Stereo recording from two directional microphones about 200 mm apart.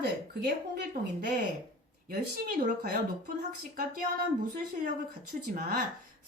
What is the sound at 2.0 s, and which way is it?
Speech, 45° right (ahead or behind).